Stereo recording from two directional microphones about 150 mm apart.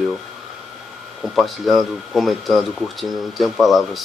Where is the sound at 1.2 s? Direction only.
Centre (ahead or behind).